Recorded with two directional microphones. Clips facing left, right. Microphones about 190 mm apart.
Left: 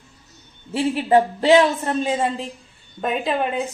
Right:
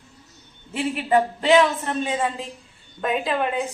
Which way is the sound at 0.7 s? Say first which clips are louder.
Left 4 dB; 30° left (ahead or behind).